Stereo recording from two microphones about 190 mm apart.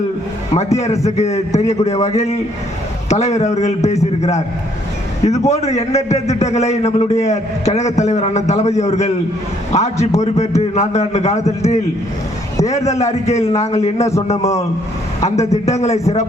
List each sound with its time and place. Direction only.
0.5 s a man's voice: 35° left (ahead or behind)
5.5 s a man's voice: 35° left (ahead or behind)
13.0 s a man's voice: 35° left (ahead or behind)
15.2 s a man's voice: 35° left (ahead or behind)